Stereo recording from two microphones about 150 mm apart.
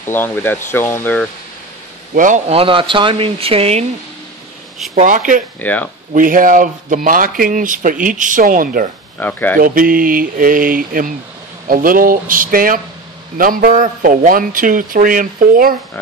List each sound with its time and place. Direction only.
0.0 s speech: 15° left (ahead or behind)
2.1 s speech: 55° right (ahead or behind)
2.5 s speech: 35° right (ahead or behind)
4.9 s speech: 60° right (ahead or behind)
5.6 s speech: 10° left (ahead or behind)
6.1 s speech: 65° right (ahead or behind)
9.2 s speech: 10° left (ahead or behind)
9.6 s speech: 70° right (ahead or behind)